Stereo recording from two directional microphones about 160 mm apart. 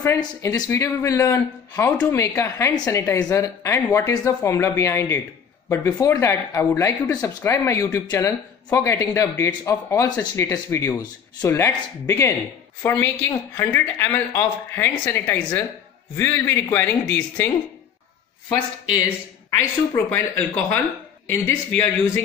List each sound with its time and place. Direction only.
0.0 s speech: 20° left (ahead or behind)
18.5 s speech: 25° left (ahead or behind)
19.9 s speech: 10° left (ahead or behind)